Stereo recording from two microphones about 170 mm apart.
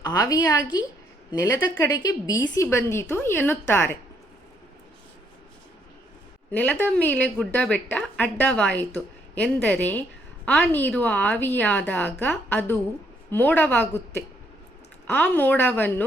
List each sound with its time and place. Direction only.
0.0 s a woman's voice: 20° left (ahead or behind)
6.5 s a woman's voice: 10° left (ahead or behind)
15.0 s a woman's voice: 10° left (ahead or behind)